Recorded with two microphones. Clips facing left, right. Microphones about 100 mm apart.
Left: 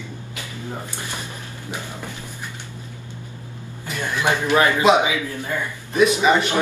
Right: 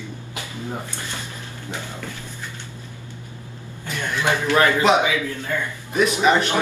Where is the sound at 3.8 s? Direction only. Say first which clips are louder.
Left 1 dB; 10° left (ahead or behind).